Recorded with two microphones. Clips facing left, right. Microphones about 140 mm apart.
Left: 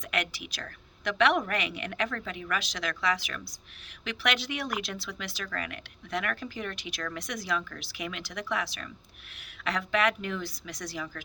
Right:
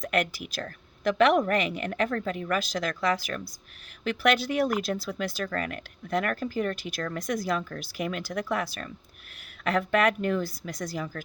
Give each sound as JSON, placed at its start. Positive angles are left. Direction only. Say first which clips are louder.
{"t": 0.0, "sound": "speech", "louder": "right 6 dB", "side_deg": -45}